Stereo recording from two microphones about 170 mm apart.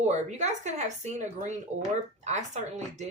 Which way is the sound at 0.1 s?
40° right (ahead or behind).